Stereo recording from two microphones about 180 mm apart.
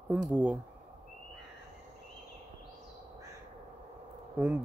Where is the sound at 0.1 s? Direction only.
10° right (ahead or behind).